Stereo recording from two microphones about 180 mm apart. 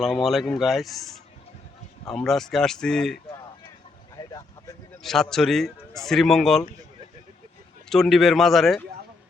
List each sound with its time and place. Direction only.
0.0 s speech: centre (ahead or behind)
4.2 s vehicle: 20° left (ahead or behind)
5.0 s speech: centre (ahead or behind)
7.9 s speech: centre (ahead or behind)